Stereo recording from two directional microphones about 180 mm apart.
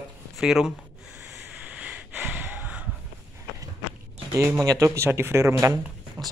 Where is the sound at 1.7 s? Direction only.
5° right (ahead or behind).